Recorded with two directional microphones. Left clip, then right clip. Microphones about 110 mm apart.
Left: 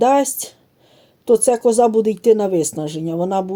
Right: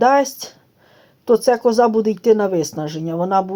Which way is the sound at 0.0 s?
20° left (ahead or behind).